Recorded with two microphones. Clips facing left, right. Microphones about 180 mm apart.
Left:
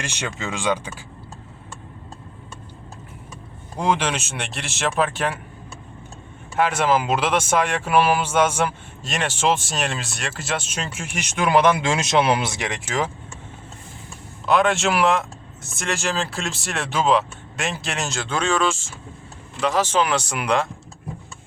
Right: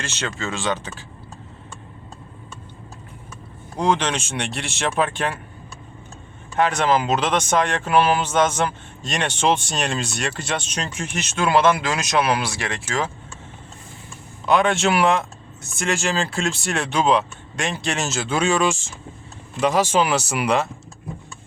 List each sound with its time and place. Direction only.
0.0 s speech: 15° left (ahead or behind)
3.8 s speech: 10° left (ahead or behind)
6.6 s speech: 5° left (ahead or behind)
14.4 s speech: centre (ahead or behind)